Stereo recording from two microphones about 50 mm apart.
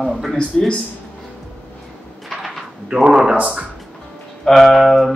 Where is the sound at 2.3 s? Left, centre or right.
Centre.